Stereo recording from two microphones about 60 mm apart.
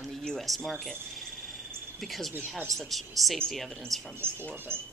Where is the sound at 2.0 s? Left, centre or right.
Centre.